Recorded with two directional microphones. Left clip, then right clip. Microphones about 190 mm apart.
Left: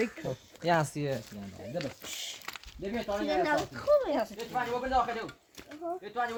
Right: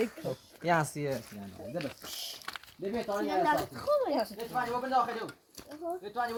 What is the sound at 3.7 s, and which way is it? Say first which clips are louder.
Speech: left 3 dB; 45° right (ahead or behind).